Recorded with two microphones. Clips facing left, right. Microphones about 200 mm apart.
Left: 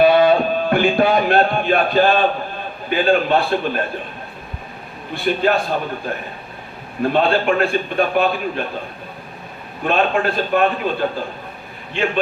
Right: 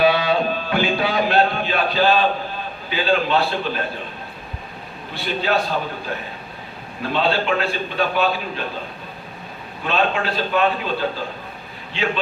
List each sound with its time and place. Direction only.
0.0 s a sound: 50° left (ahead or behind)
2.9 s a man's voice: 55° left (ahead or behind)
5.1 s a man's voice: 55° left (ahead or behind)
7.0 s a man's voice: 50° left (ahead or behind)
9.8 s a man's voice: 50° left (ahead or behind)
11.9 s a man's voice: 55° left (ahead or behind)